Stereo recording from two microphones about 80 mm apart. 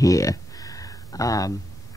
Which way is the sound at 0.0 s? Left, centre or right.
Left.